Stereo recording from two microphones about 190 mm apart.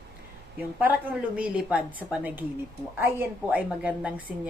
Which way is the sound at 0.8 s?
10° right (ahead or behind).